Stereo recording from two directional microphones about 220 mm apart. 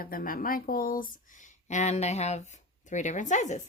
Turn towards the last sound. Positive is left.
turn(degrees=35)  # may be behind; listen again after turning